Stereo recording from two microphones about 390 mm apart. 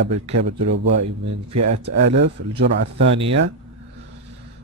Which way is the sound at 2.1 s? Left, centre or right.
Right.